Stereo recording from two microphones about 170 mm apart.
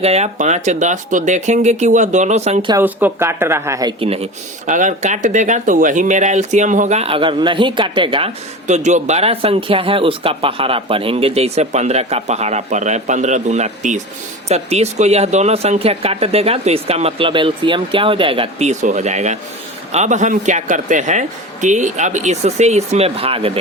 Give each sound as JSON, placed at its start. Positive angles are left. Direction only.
{"t": 0.0, "sound": "speech", "side_deg": -40}
{"t": 2.8, "sound": "speech", "side_deg": -15}
{"t": 4.0, "sound": "speech", "side_deg": -35}
{"t": 8.6, "sound": "speech", "side_deg": -45}